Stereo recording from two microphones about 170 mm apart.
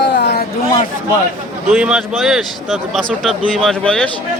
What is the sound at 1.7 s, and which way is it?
Speech, 5° right (ahead or behind).